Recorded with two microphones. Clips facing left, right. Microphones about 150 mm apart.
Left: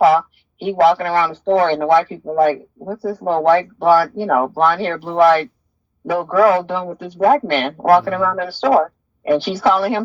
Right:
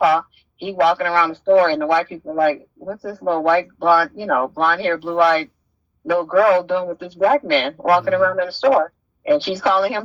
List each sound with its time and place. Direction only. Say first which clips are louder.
0.6 s speech: left 3 dB; 40° left (ahead or behind)